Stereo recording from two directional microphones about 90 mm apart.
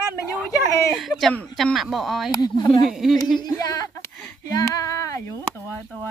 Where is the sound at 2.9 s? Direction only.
5° right (ahead or behind).